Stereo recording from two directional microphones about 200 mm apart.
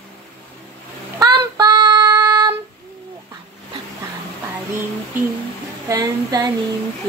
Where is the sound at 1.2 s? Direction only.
20° right (ahead or behind).